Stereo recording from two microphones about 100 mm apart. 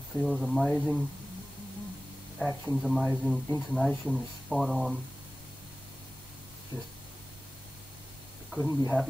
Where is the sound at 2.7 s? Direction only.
Centre (ahead or behind).